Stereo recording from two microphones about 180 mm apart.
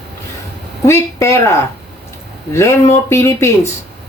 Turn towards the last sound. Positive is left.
turn(degrees=15)  # may be behind; listen again after turning